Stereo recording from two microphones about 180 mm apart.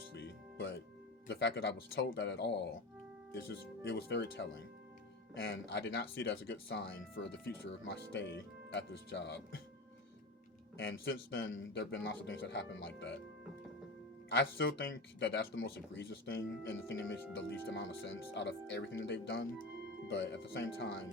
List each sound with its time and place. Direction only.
0.1 s music: 75° left (ahead or behind)
1.3 s speech: 75° left (ahead or behind)
3.8 s speech: 85° left
5.3 s speech: 90° left; by 9.4 s 75° left (ahead or behind)
10.8 s speech: 90° left
14.3 s speech: 75° left (ahead or behind)